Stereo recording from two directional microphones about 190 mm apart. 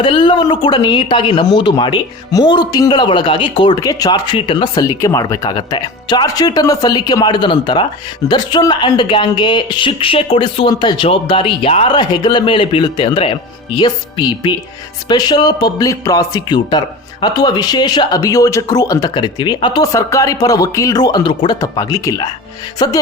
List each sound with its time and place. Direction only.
0.0 s speech: 25° left (ahead or behind)